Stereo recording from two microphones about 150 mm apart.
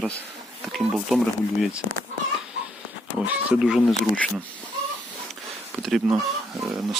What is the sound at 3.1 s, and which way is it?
Speech, 10° right (ahead or behind).